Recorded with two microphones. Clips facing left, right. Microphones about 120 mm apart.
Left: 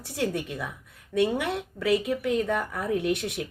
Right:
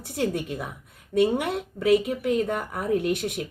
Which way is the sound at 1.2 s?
50° right (ahead or behind).